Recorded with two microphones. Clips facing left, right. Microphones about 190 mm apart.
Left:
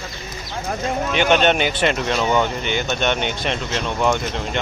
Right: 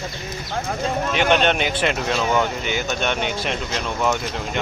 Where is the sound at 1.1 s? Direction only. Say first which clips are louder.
Left 2 dB; centre (ahead or behind).